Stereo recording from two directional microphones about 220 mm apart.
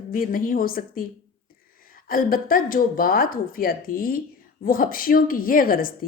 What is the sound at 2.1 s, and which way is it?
Speech, 40° left (ahead or behind).